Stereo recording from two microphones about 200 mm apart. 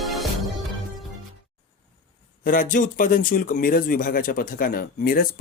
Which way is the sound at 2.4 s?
40° left (ahead or behind).